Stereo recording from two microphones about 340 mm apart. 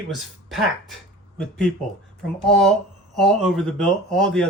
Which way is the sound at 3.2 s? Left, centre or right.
Centre.